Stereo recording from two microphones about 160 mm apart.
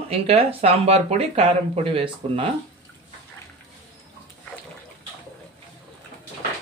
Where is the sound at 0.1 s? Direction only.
40° right (ahead or behind).